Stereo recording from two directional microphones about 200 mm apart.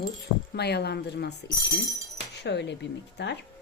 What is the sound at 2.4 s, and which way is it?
Speech, 60° left (ahead or behind).